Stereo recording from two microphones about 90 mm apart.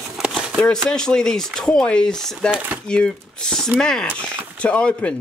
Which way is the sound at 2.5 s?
15° right (ahead or behind).